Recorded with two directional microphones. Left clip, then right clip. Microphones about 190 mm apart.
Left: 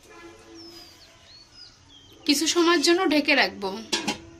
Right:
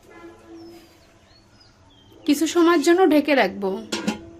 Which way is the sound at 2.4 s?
40° right (ahead or behind).